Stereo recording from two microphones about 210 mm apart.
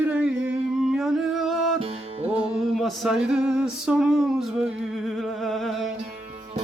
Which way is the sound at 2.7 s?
Centre (ahead or behind).